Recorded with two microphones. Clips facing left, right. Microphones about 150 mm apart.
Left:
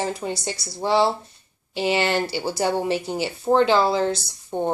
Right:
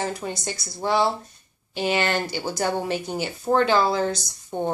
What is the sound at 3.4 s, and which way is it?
Speech, 20° left (ahead or behind).